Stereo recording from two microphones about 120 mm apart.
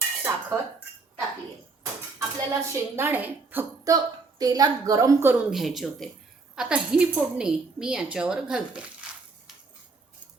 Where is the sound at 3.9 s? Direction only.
35° right (ahead or behind).